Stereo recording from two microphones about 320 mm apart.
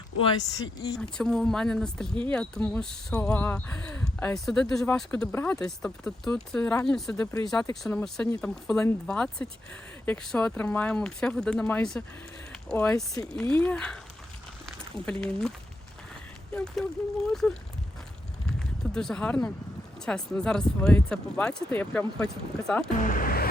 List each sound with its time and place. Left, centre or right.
0.2 s speech: centre
17.3 s speech: centre
18.9 s speech: centre
23.0 s a sound: left